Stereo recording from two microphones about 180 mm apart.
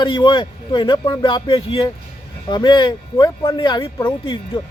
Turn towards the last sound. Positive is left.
turn(degrees=20)  # may be behind; listen again after turning